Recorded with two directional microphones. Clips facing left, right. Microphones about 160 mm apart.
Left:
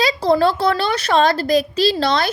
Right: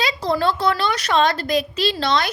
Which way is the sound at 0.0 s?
35° left (ahead or behind).